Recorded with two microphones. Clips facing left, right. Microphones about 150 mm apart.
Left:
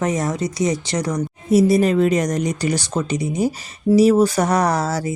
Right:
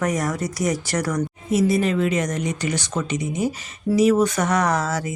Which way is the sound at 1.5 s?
40° left (ahead or behind).